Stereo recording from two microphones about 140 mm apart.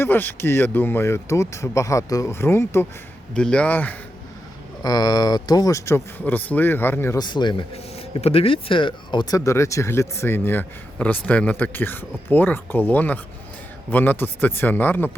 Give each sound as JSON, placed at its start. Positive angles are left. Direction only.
{"t": 0.0, "sound": "speech", "side_deg": 15}
{"t": 4.8, "sound": "speech", "side_deg": 30}
{"t": 7.2, "sound": "a man's voice", "side_deg": 30}
{"t": 7.7, "sound": "speech", "side_deg": 45}